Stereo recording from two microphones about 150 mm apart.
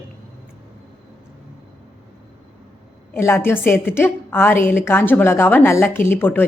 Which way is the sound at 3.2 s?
15° left (ahead or behind).